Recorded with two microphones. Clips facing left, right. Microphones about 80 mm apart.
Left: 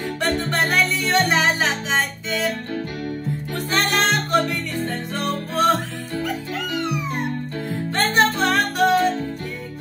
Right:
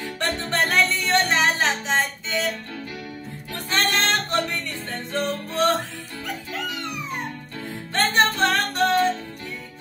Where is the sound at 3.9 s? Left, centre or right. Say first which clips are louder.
Left 6 dB; centre.